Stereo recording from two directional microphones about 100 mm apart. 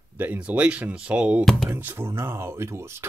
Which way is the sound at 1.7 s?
25° right (ahead or behind).